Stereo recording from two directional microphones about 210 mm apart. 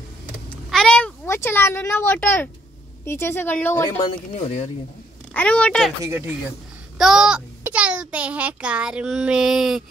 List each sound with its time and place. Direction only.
0.7 s a sound: centre (ahead or behind)
3.1 s a woman's voice: 10° left (ahead or behind)
4.4 s speech: 35° left (ahead or behind)
5.3 s a child's voice: 5° left (ahead or behind)
6.0 s a child's voice: 10° right (ahead or behind)